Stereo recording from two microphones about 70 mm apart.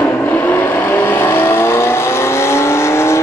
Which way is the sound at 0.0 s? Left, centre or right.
Left.